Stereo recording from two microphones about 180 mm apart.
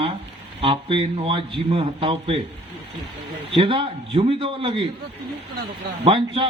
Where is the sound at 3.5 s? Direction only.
30° right (ahead or behind).